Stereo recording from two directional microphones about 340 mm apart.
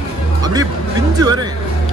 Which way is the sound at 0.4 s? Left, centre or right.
Centre.